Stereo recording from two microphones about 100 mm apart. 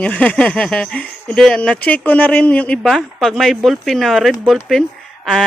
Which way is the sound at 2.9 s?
Centre (ahead or behind).